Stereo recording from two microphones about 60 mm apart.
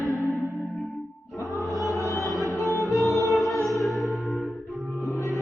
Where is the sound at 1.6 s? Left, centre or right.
Centre.